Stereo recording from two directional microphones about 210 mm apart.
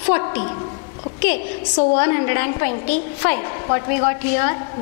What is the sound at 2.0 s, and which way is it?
A woman's voice, 15° left (ahead or behind).